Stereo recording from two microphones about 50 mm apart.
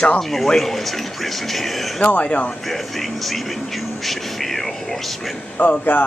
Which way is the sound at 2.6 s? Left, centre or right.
Centre.